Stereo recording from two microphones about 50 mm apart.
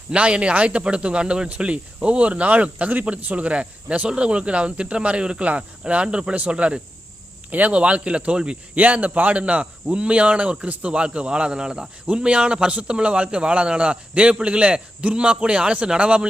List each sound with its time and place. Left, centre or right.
0.1 s a man's voice: right